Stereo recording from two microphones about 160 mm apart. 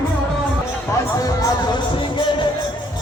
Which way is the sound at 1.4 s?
30° left (ahead or behind).